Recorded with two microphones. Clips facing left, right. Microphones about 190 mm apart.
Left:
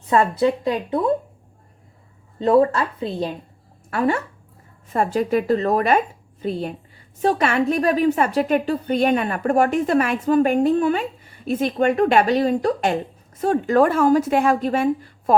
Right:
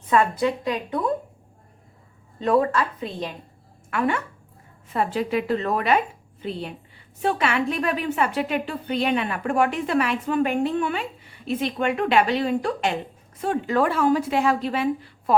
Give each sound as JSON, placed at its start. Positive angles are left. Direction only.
{"t": 0.1, "sound": "speech", "side_deg": 30}
{"t": 2.4, "sound": "a woman's voice", "side_deg": 30}